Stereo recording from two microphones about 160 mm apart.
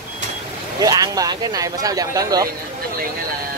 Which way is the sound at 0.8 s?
25° right (ahead or behind).